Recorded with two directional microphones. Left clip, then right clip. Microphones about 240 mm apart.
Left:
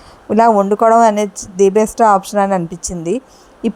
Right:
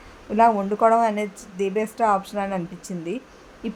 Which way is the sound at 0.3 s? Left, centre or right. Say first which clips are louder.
Left 8 dB; left.